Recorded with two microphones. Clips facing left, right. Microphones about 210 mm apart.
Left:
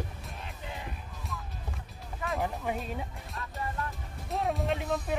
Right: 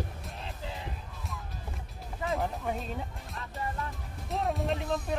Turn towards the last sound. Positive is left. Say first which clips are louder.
# even
turn(degrees=0)  # may be behind; listen again after turning